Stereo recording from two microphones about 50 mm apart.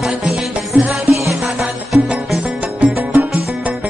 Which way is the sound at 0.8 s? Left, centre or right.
Right.